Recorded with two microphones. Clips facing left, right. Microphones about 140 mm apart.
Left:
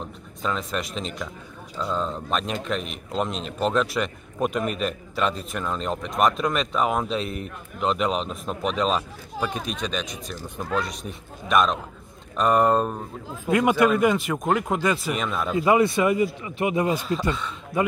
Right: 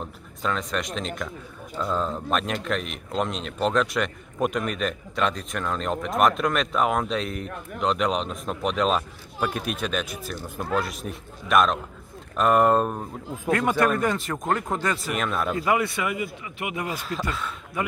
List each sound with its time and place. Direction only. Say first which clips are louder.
0.0 s speech: even; centre (ahead or behind)
13.5 s speech: left 3 dB; 15° left (ahead or behind)
15.1 s speech: right 1 dB; centre (ahead or behind)
15.5 s speech: left 8 dB; 20° left (ahead or behind)